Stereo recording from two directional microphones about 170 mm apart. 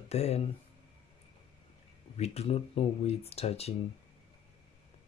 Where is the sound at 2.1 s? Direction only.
40° left (ahead or behind).